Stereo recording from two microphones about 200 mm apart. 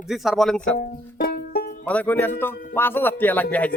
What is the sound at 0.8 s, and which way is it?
Banjo, 50° left (ahead or behind).